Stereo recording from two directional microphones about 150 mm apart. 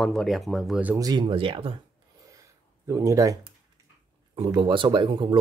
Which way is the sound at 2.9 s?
20° right (ahead or behind).